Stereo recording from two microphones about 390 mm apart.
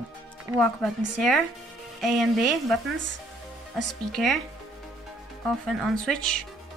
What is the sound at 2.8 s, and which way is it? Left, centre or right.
Speech, right.